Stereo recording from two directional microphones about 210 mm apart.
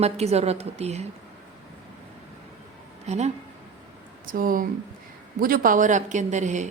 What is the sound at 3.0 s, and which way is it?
A woman's voice, 30° right (ahead or behind).